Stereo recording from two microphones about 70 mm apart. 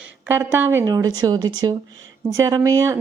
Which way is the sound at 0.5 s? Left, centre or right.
Right.